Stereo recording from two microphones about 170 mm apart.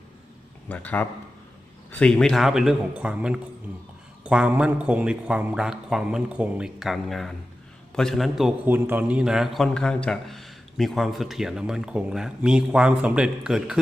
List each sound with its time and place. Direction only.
0.7 s a man's voice: 10° left (ahead or behind)